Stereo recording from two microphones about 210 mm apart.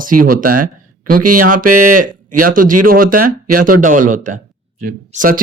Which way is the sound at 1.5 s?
40° right (ahead or behind).